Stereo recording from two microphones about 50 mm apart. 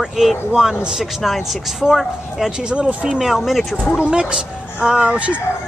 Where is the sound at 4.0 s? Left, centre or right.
Right.